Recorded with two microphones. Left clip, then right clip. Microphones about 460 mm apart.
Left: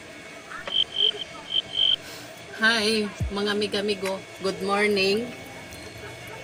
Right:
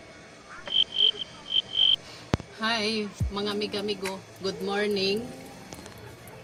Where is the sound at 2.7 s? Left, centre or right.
Right.